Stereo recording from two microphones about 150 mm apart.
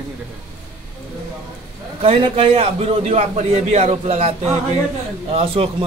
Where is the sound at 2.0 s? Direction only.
35° right (ahead or behind).